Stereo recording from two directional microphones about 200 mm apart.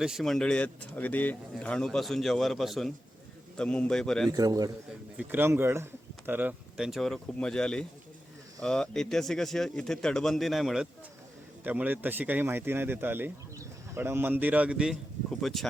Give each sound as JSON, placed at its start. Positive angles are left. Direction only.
{"t": 0.0, "sound": "speech", "side_deg": 0}
{"t": 4.3, "sound": "a man's voice", "side_deg": -20}